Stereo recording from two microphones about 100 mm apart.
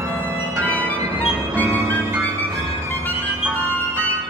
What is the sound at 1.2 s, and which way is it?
Music, 20° right (ahead or behind).